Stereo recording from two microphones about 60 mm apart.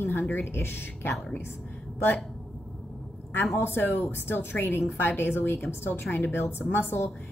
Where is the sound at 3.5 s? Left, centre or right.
Left.